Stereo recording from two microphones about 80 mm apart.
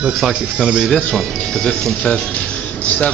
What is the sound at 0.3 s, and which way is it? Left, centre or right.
Speech, centre.